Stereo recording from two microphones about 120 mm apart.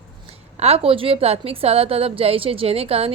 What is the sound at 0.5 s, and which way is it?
A woman's voice, 60° right (ahead or behind).